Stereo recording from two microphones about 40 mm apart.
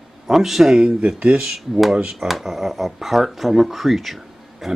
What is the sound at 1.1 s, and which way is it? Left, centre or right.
Speech, right.